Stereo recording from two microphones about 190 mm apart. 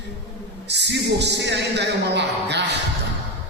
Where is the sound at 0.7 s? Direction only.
65° right (ahead or behind).